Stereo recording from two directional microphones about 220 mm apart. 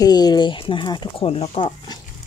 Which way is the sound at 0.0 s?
20° left (ahead or behind).